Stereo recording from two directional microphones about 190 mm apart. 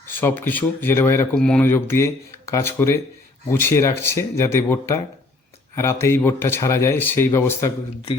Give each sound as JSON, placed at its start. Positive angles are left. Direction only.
{"t": 0.0, "sound": "speech", "side_deg": 10}